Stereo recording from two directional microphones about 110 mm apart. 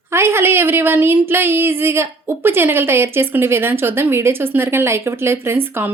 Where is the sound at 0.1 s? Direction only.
20° right (ahead or behind).